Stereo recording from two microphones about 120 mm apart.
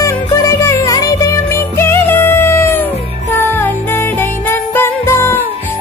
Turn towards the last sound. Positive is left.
turn(degrees=20)  # may be behind; listen again after turning